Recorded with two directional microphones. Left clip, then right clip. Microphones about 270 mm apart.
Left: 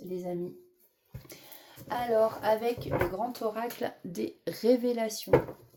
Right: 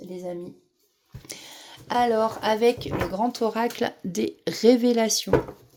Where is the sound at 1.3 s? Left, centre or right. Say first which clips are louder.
Right 11 dB; right.